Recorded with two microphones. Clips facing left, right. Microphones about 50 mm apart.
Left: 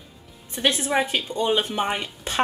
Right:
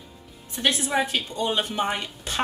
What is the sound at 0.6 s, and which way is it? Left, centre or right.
A woman's voice, centre.